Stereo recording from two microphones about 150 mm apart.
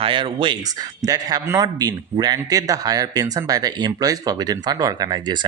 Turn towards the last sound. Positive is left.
turn(degrees=-30)  # may be behind; listen again after turning